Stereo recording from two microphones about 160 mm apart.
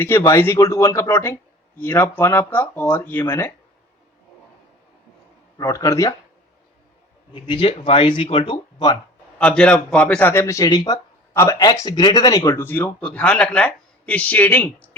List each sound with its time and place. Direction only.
0.0 s a man's voice: 15° left (ahead or behind)
5.5 s speech: 20° left (ahead or behind)
7.4 s speech: 35° left (ahead or behind)
9.4 s a man's voice: 10° left (ahead or behind)